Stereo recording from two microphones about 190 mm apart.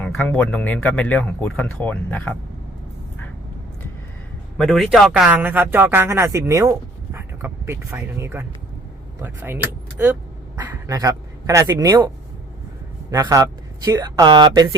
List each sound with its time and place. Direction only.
0.0 s speech: 5° left (ahead or behind)
4.5 s a man's voice: centre (ahead or behind); by 14.8 s 20° right (ahead or behind)